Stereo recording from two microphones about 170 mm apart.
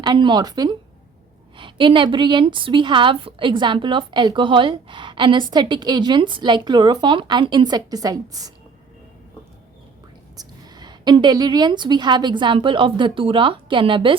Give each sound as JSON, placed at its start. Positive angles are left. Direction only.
{"t": 0.0, "sound": "a woman's voice", "side_deg": -25}
{"t": 10.3, "sound": "a woman's voice", "side_deg": -25}